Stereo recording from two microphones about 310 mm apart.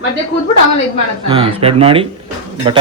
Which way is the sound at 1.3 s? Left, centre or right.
Centre.